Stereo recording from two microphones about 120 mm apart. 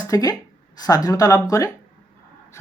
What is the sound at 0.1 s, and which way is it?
Speech, 30° left (ahead or behind).